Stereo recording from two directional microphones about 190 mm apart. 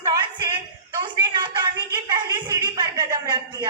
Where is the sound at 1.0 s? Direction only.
25° right (ahead or behind).